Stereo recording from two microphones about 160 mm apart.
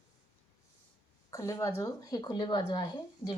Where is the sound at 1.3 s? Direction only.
20° left (ahead or behind).